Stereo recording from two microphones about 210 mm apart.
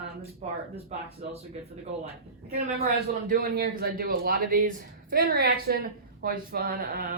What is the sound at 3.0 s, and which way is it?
A man's voice, 45° right (ahead or behind).